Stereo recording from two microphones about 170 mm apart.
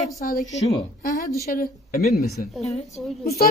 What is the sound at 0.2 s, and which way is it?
Speech, 55° left (ahead or behind).